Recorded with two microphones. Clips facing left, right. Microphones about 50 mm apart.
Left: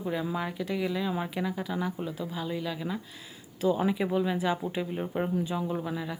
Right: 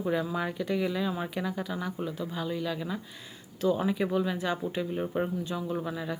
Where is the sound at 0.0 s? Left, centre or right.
Centre.